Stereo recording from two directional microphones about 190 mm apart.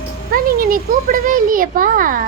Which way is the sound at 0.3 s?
50° right (ahead or behind).